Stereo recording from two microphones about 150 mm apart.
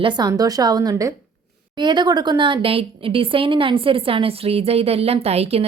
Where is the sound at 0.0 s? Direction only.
30° right (ahead or behind).